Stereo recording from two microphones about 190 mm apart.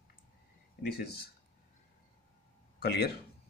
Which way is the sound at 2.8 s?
60° left (ahead or behind).